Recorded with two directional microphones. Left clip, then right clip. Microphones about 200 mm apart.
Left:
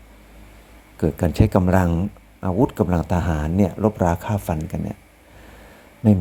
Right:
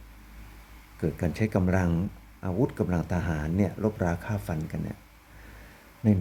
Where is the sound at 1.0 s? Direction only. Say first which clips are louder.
Left 9 dB; 25° left (ahead or behind).